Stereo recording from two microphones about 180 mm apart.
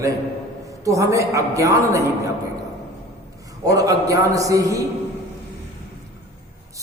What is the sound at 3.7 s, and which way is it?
A man's voice, 20° right (ahead or behind).